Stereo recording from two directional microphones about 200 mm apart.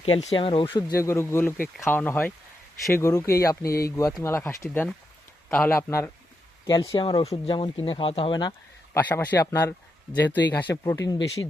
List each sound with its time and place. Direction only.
0.0 s speech: 30° left (ahead or behind)
3.6 s speech: 50° left (ahead or behind)
3.9 s speech: 15° left (ahead or behind)
9.0 s speech: 10° left (ahead or behind)